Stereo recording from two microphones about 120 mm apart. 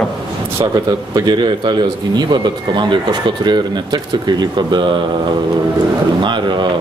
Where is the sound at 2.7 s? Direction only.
40° right (ahead or behind).